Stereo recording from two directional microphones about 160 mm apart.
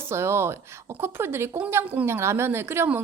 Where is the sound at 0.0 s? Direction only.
15° right (ahead or behind).